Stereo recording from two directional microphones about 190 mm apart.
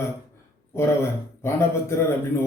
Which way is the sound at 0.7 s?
15° left (ahead or behind).